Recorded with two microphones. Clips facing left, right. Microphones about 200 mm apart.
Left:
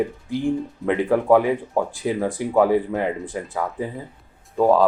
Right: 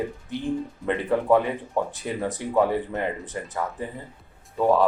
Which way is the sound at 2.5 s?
90° left.